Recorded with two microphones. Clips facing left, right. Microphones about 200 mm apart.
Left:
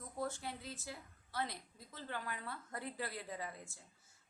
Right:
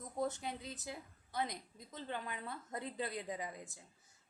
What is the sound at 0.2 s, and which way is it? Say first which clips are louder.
A woman's voice: right 3 dB; 20° right (ahead or behind).